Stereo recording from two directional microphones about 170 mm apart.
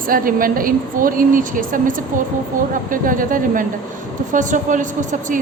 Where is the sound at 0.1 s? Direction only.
55° right (ahead or behind).